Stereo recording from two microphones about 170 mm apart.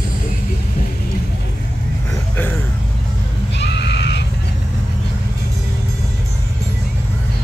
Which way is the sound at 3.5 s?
90° left.